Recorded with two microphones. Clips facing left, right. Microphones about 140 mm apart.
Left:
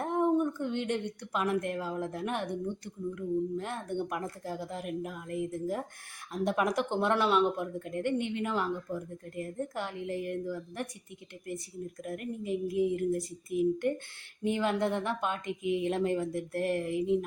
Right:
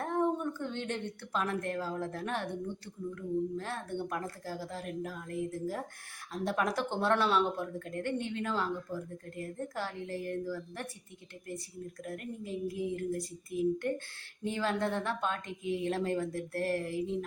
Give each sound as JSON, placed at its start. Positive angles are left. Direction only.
{"t": 0.0, "sound": "a woman's voice", "side_deg": 15}
{"t": 12.0, "sound": "a woman's voice", "side_deg": 15}